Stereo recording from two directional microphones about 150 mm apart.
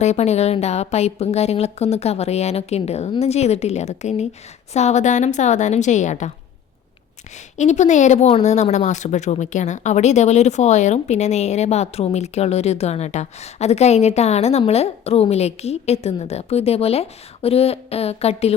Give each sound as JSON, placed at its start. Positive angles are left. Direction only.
{"t": 0.0, "sound": "speech", "side_deg": 50}
{"t": 7.5, "sound": "speech", "side_deg": 50}